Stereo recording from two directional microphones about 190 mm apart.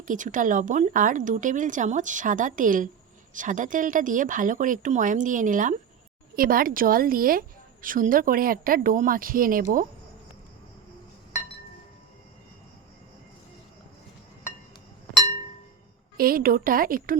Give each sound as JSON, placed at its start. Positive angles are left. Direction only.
{"t": 0.0, "sound": "a woman's voice", "side_deg": -45}
{"t": 16.1, "sound": "a woman's voice", "side_deg": -50}